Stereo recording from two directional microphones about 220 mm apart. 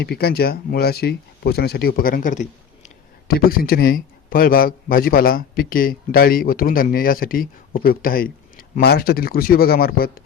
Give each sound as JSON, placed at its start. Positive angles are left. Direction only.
{"t": 0.0, "sound": "a man's voice", "side_deg": 45}